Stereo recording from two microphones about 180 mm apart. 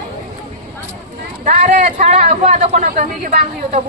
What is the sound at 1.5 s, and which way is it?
Speech, 45° right (ahead or behind).